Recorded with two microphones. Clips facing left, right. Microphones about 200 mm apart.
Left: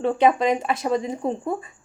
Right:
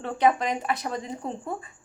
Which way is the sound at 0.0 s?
20° left (ahead or behind).